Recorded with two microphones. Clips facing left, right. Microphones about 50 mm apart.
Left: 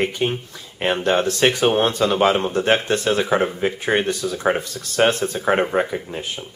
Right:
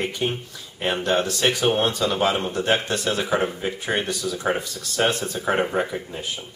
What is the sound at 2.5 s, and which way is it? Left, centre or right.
Speech, left.